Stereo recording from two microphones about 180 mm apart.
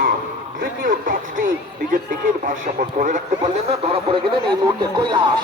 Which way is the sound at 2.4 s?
45° right (ahead or behind).